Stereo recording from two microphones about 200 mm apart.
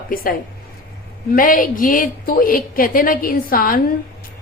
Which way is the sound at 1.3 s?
45° left (ahead or behind).